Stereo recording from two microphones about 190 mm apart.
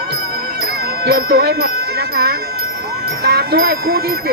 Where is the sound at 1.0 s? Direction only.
55° right (ahead or behind).